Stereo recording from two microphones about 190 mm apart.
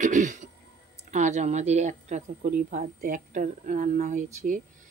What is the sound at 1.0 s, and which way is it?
Speech, 40° right (ahead or behind).